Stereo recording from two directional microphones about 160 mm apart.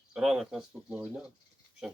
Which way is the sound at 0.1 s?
5° right (ahead or behind).